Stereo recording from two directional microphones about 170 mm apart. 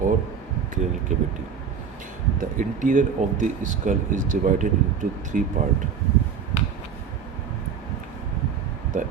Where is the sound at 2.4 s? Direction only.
50° right (ahead or behind).